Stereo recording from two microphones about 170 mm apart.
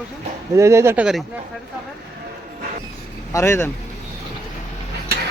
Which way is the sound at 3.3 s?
15° left (ahead or behind).